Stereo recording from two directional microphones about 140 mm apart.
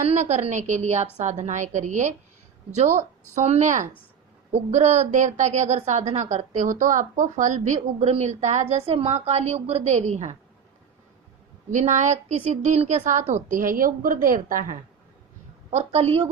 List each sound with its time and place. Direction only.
0.0 s a woman's voice: 50° right (ahead or behind)
3.3 s a woman's voice: 55° right (ahead or behind)
11.7 s a woman's voice: 60° right (ahead or behind)
13.5 s a woman's voice: 75° right (ahead or behind)
15.7 s a woman's voice: 50° right (ahead or behind)